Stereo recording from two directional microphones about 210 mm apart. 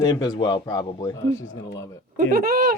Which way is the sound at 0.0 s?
20° left (ahead or behind).